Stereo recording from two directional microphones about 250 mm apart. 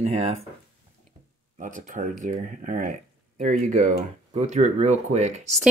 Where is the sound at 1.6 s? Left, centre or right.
Right.